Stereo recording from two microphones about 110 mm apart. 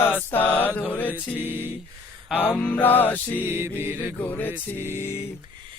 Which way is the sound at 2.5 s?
15° left (ahead or behind).